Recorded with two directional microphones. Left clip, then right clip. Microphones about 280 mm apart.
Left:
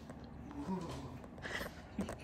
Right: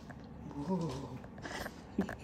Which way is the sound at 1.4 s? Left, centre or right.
Right.